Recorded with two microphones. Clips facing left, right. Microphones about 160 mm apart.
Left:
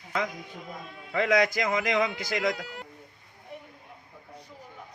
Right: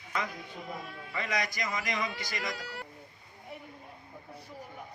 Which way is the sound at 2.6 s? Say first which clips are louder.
Left 1 dB; 20° left (ahead or behind).